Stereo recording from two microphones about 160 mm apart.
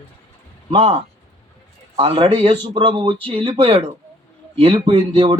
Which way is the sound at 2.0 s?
35° right (ahead or behind).